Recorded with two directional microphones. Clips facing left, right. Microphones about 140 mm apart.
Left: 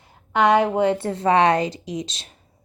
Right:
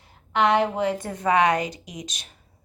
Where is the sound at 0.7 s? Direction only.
30° left (ahead or behind).